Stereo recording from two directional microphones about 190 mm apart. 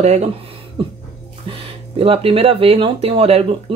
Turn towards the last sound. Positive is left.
turn(degrees=-30)  # may be behind; listen again after turning